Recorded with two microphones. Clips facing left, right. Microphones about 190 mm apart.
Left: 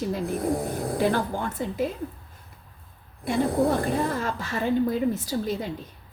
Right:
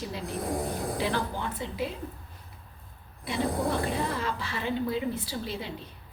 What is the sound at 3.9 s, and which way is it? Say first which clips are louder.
Speech: left 4 dB; 45° left (ahead or behind).